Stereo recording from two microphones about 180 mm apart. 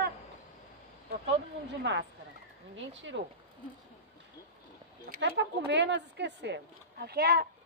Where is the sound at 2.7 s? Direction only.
90° right.